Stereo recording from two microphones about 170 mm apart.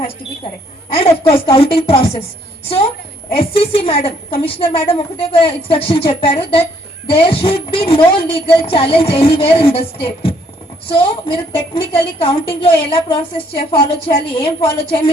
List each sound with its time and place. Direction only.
0.9 s a woman's voice: 35° left (ahead or behind)